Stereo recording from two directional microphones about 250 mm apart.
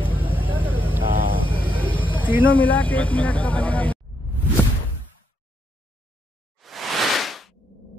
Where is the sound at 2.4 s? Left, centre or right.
Centre.